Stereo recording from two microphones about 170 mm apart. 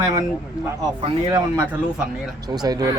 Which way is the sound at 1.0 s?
20° right (ahead or behind).